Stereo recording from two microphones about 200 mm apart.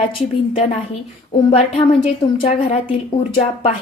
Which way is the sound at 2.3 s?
25° left (ahead or behind).